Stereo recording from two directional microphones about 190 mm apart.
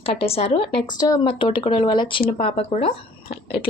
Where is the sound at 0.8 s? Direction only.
20° left (ahead or behind).